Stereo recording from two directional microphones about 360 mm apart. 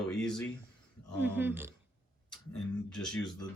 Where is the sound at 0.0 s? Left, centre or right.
Centre.